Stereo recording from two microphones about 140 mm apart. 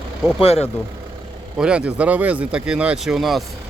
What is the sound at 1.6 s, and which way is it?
Speech, 5° right (ahead or behind).